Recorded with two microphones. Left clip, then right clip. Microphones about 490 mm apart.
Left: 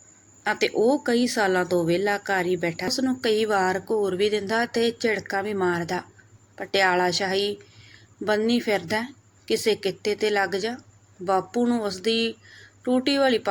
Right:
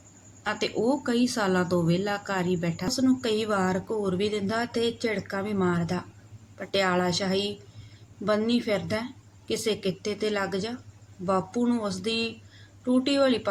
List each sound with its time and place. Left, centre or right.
0.4 s speech: right